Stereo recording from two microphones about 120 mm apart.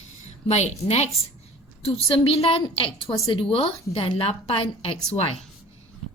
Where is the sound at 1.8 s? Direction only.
55° left (ahead or behind).